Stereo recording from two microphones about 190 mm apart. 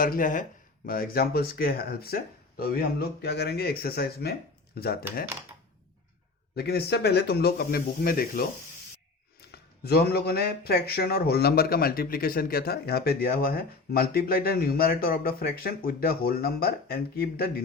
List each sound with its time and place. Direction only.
0.0 s speech: 45° left (ahead or behind)
6.6 s speech: 55° left (ahead or behind)